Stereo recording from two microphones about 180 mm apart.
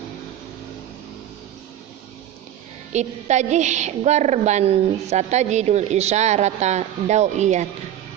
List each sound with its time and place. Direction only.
2.9 s a woman's voice: 40° right (ahead or behind)